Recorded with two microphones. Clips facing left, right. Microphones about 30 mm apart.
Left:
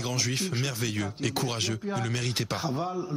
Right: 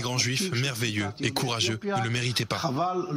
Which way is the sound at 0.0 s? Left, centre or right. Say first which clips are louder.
Right 2 dB; centre.